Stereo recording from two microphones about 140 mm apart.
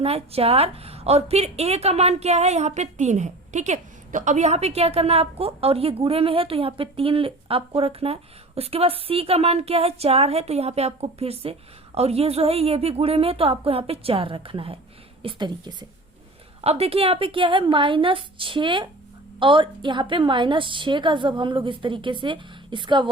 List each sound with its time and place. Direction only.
0.0 s a woman's voice: 45° right (ahead or behind)
16.6 s a woman's voice: 45° right (ahead or behind)